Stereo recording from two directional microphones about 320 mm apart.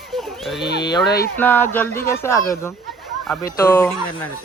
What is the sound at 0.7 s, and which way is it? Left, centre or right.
Speech, left.